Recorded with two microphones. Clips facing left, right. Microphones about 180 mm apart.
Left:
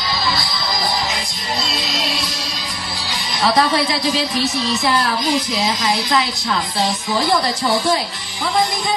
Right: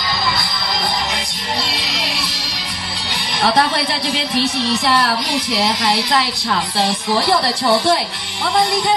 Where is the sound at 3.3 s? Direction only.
60° right (ahead or behind).